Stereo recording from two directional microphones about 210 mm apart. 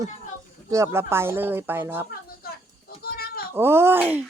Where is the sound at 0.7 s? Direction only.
15° right (ahead or behind).